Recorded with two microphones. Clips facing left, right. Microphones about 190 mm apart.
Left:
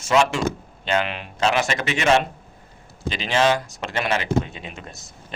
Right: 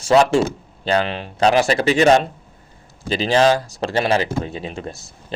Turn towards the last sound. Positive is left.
turn(degrees=-30)  # may be behind; listen again after turning